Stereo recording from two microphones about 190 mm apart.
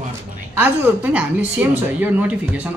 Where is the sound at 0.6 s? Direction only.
10° right (ahead or behind).